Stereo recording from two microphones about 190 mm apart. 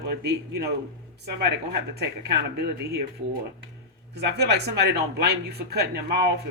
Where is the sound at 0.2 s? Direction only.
65° right (ahead or behind).